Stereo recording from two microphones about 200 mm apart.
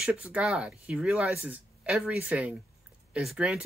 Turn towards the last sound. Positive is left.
turn(degrees=0)  # may be behind; listen again after turning